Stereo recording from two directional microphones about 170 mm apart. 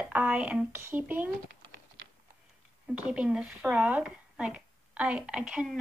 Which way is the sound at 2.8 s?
5° right (ahead or behind).